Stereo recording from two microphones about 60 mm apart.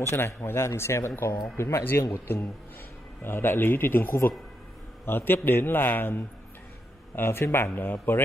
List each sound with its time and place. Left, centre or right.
0.0 s a man's voice: left